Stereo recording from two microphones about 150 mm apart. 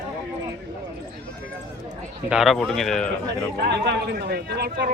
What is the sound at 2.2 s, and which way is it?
Speech, centre (ahead or behind).